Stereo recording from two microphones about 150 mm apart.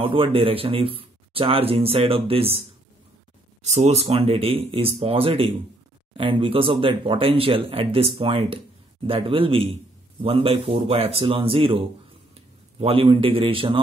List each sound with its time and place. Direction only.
0.0 s speech: 35° right (ahead or behind)
3.6 s speech: 45° right (ahead or behind)